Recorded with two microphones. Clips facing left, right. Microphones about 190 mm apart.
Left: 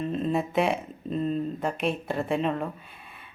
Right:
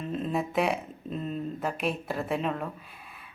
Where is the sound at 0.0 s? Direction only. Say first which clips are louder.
Left 3 dB; centre (ahead or behind).